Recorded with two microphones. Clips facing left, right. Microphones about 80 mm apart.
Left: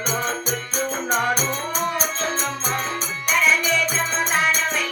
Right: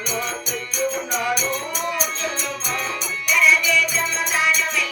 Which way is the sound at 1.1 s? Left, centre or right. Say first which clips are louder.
Left 1 dB; left.